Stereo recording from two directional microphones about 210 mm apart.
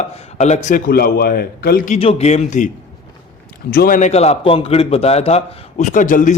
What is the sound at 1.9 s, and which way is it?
A man's voice, 30° left (ahead or behind).